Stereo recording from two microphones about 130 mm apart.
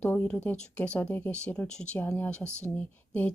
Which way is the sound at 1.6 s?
60° left (ahead or behind).